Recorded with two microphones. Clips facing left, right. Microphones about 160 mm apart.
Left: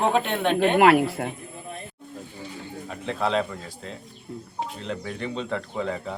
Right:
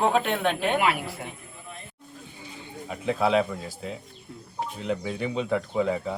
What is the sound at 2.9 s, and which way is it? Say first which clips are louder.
Speech: right 3 dB; 10° right (ahead or behind).